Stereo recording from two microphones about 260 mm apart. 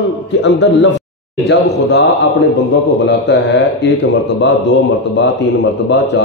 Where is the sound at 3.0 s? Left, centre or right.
Left.